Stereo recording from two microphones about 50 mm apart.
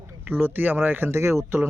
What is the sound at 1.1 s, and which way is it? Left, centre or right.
Speech, right.